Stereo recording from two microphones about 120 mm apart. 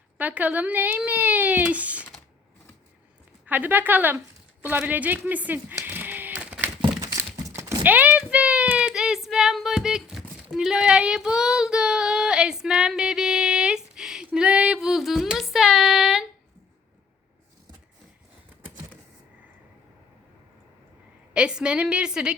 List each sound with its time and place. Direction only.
0.2 s speech: 15° right (ahead or behind)
3.4 s speech: 15° right (ahead or behind)
5.8 s a sound: 15° right (ahead or behind)
7.0 s a sound: 25° right (ahead or behind)
7.4 s typing: 25° right (ahead or behind); by 16.2 s 5° right (ahead or behind)
21.3 s speech: 10° right (ahead or behind)